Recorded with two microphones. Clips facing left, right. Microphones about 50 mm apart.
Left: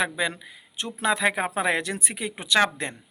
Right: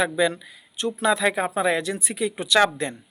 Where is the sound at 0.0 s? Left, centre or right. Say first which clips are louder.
Right 4 dB; left.